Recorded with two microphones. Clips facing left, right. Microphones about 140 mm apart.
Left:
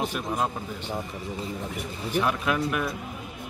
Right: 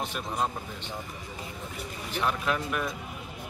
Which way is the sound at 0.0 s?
10° left (ahead or behind).